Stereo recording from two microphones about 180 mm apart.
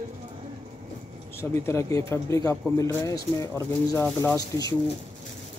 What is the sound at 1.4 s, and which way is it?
Speech, 15° left (ahead or behind).